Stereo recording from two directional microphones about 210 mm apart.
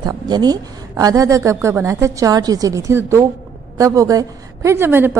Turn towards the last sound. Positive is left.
turn(degrees=-10)  # may be behind; listen again after turning